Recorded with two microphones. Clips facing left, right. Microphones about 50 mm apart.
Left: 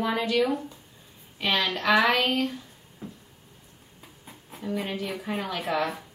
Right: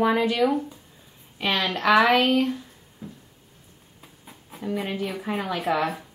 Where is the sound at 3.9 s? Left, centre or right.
Centre.